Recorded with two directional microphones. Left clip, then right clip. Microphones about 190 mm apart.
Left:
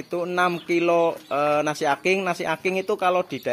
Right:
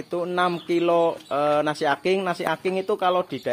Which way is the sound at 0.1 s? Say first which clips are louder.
Left 1 dB; 5° right (ahead or behind).